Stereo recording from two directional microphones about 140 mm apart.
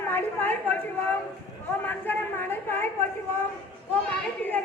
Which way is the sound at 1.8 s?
15° left (ahead or behind).